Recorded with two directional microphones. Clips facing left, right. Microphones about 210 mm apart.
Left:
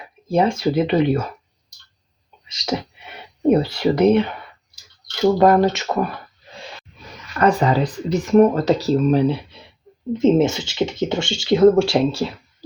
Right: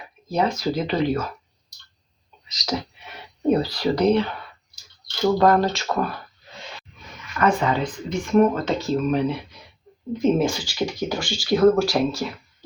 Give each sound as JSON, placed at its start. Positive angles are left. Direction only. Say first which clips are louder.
{"t": 0.3, "sound": "speech", "louder": "left 5 dB", "side_deg": 30}
{"t": 2.5, "sound": "speech", "louder": "left 3 dB", "side_deg": 30}
{"t": 7.3, "sound": "speech", "louder": "left 4 dB", "side_deg": 35}